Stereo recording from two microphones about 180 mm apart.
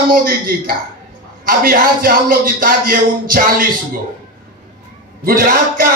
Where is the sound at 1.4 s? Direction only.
55° right (ahead or behind).